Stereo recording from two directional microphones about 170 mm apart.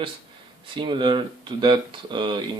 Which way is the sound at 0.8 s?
25° right (ahead or behind).